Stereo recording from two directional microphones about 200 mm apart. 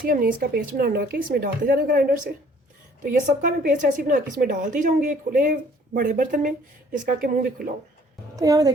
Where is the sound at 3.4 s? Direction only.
40° right (ahead or behind).